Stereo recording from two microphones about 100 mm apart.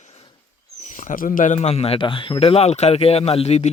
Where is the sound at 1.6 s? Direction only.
85° left.